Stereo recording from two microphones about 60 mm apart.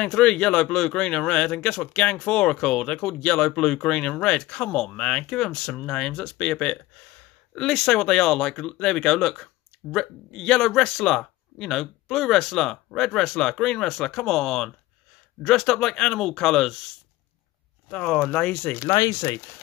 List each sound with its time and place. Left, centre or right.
0.0 s speech: centre
7.5 s speech: centre
17.8 s speech: centre
18.8 s speech: left